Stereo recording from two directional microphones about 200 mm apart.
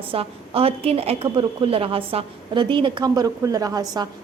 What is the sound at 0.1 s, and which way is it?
A woman's voice, 30° right (ahead or behind).